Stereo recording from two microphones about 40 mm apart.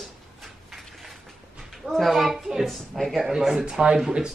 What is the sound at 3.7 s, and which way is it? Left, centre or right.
Speech, right.